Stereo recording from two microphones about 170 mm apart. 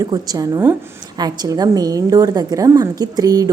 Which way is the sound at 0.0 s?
20° right (ahead or behind).